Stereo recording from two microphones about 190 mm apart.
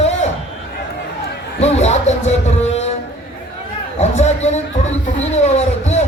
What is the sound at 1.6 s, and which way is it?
Music, 35° left (ahead or behind).